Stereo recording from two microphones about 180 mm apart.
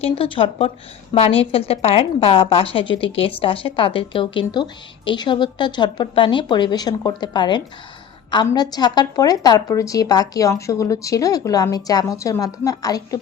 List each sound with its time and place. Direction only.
0.0 s a woman's voice: 30° left (ahead or behind)